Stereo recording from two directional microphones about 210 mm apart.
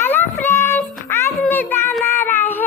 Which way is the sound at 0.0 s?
10° left (ahead or behind).